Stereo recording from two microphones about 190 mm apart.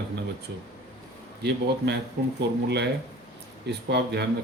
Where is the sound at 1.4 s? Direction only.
60° right (ahead or behind).